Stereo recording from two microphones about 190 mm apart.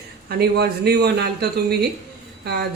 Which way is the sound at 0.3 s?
55° right (ahead or behind).